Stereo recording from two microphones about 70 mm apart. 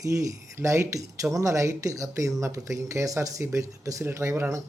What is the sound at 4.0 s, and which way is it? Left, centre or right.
Speech, right.